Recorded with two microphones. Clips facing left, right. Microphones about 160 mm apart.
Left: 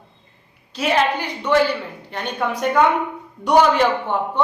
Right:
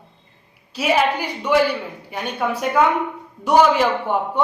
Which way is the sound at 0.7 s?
10° right (ahead or behind).